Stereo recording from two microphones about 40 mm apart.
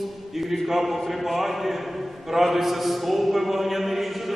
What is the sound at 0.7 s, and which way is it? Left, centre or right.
A man's voice, centre.